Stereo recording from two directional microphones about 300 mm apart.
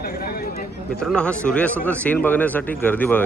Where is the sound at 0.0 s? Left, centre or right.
Left.